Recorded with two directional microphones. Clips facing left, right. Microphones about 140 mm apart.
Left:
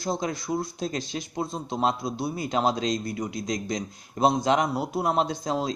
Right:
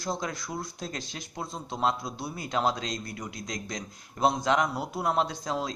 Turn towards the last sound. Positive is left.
turn(degrees=25)  # may be behind; listen again after turning